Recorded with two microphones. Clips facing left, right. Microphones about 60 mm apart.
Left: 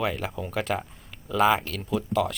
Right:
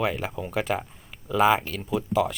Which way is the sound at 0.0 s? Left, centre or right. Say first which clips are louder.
Right 1 dB; centre.